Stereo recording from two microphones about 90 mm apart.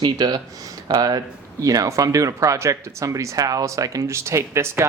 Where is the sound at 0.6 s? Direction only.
45° right (ahead or behind).